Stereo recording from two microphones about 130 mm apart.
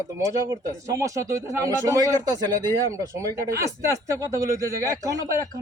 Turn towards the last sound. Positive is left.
turn(degrees=-25)  # may be behind; listen again after turning